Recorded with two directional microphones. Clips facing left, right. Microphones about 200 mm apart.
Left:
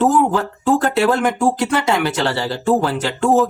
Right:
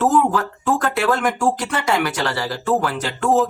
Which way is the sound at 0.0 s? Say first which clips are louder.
Left 2 dB; 25° left (ahead or behind).